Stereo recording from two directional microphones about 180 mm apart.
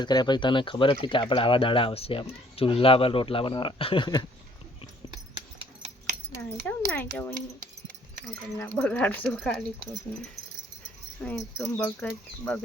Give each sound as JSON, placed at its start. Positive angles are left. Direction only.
{"t": 0.0, "sound": "speech", "side_deg": 25}
{"t": 6.3, "sound": "speech", "side_deg": 10}
{"t": 11.2, "sound": "speech", "side_deg": 10}